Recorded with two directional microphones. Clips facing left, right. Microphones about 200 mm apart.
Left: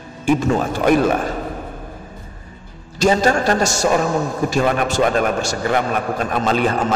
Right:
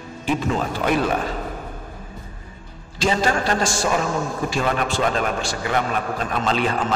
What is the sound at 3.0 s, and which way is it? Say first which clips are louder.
A man's voice: left 5 dB; 45° left (ahead or behind).